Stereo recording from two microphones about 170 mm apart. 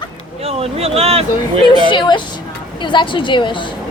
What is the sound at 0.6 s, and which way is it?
Speech, 35° right (ahead or behind).